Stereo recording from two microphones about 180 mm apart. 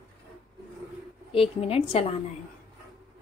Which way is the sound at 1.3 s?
30° left (ahead or behind).